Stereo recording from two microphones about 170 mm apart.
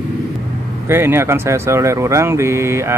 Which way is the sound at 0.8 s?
15° right (ahead or behind).